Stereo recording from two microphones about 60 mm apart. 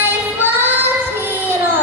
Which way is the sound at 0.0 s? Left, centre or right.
Right.